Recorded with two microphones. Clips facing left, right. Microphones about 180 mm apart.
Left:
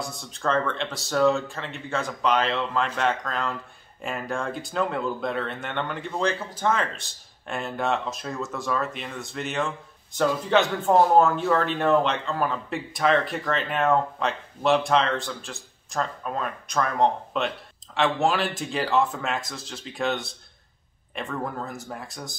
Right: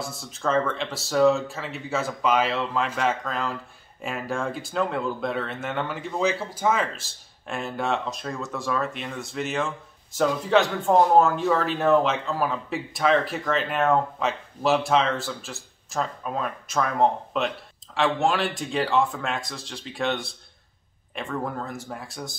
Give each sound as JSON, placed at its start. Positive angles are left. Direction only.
{"t": 0.0, "sound": "speech", "side_deg": 0}